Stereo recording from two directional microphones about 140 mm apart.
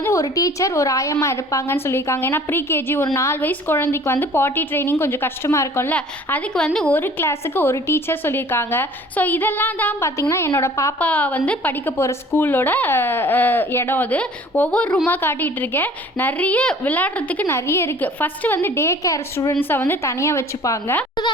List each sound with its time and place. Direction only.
0.0 s a woman's voice: 20° left (ahead or behind)
11.0 s a woman's voice: 10° left (ahead or behind)